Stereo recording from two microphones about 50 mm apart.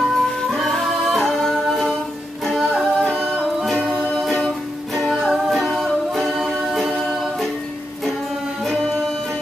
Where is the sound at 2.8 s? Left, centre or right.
Centre.